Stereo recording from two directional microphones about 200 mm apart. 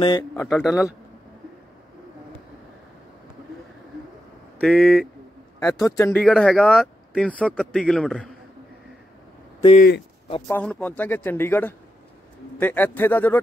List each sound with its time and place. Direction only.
0.4 s speech: 5° left (ahead or behind)
4.6 s speech: centre (ahead or behind)
5.6 s speech: 15° left (ahead or behind)
6.2 s speech: 5° left (ahead or behind)
9.8 s speech: 55° left (ahead or behind)
10.5 s speech: 5° left (ahead or behind)